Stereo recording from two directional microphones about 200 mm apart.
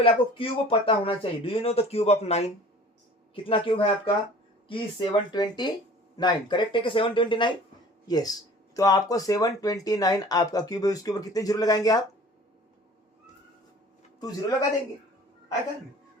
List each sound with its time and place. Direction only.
0.0 s speech: 25° left (ahead or behind)